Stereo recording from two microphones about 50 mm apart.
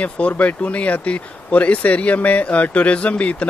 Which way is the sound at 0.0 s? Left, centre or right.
Left.